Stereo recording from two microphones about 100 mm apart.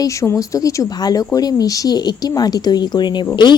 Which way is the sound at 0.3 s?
35° left (ahead or behind).